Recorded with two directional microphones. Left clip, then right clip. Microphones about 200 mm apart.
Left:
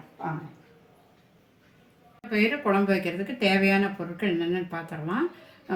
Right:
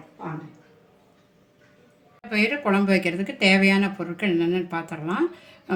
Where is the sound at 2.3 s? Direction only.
45° right (ahead or behind).